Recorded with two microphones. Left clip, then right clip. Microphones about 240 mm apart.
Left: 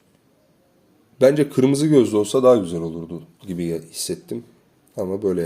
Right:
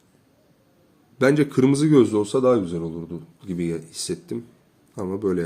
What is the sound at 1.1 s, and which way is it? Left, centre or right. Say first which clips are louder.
A man's voice: left 3 dB; centre.